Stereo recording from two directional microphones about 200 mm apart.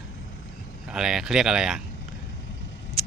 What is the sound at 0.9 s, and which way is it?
Speech, 5° right (ahead or behind).